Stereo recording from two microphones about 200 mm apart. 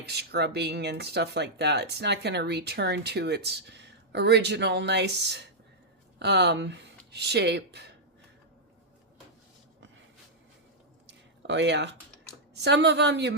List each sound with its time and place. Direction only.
0.0 s speech: 55° right (ahead or behind)
11.4 s speech: 60° right (ahead or behind)